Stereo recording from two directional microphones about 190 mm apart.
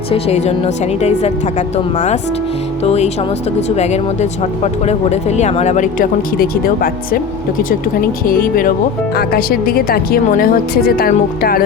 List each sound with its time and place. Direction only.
0.1 s speech: 35° left (ahead or behind); by 7.2 s 50° left (ahead or behind)
8.2 s a woman's voice: 50° left (ahead or behind)